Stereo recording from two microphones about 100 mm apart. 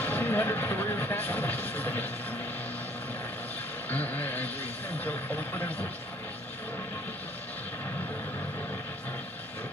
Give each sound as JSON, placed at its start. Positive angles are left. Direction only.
{"t": 0.0, "sound": "vehicle", "side_deg": 20}
{"t": 3.9, "sound": "vehicle", "side_deg": 15}
{"t": 4.9, "sound": "speech", "side_deg": 20}